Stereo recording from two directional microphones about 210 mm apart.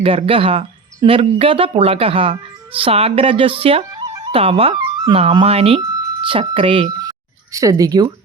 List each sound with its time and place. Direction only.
0.0 s speech: 25° right (ahead or behind)